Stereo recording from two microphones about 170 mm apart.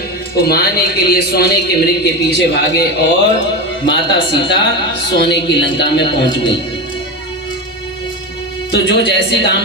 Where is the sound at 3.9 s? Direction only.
90° left.